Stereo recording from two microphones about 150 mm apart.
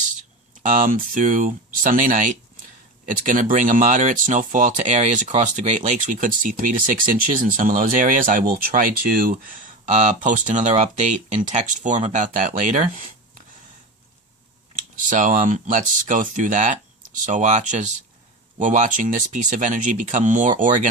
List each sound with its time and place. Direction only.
0.6 s speech: 60° right (ahead or behind)
14.8 s speech: 60° right (ahead or behind)